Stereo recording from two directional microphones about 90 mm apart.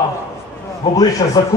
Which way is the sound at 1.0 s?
45° left (ahead or behind).